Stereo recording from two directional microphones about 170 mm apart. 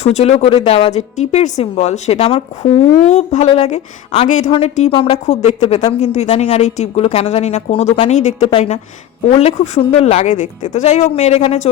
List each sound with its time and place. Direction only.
0.0 s a woman's voice: 40° left (ahead or behind)